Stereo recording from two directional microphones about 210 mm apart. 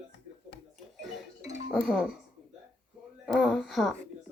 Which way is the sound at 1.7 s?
Centre (ahead or behind).